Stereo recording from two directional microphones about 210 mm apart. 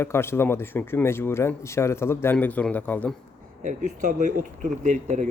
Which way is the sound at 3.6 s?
40° right (ahead or behind).